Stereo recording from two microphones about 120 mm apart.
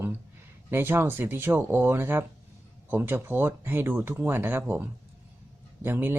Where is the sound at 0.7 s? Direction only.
20° right (ahead or behind).